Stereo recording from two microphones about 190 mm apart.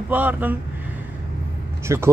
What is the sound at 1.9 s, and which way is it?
Speech, 15° right (ahead or behind).